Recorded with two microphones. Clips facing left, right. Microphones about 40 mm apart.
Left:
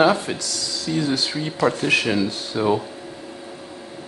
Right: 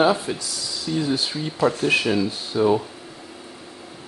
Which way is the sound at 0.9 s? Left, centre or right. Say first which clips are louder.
Left 1 dB; left.